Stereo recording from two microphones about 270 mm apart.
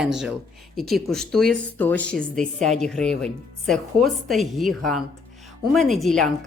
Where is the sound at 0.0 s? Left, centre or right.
Centre.